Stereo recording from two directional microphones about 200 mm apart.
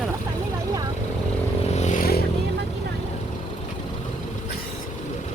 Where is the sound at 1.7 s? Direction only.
35° left (ahead or behind).